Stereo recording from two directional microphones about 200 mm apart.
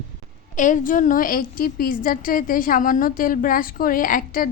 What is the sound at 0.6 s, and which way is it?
A woman's voice, 40° left (ahead or behind).